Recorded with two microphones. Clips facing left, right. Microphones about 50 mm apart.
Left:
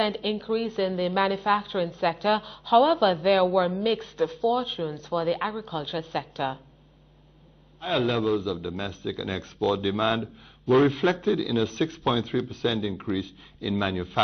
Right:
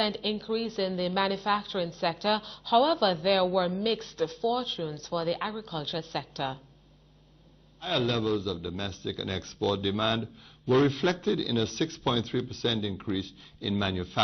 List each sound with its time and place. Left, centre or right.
0.0 s a woman's voice: centre
7.8 s a woman's voice: centre
10.2 s a man's voice: centre
10.9 s a woman's voice: centre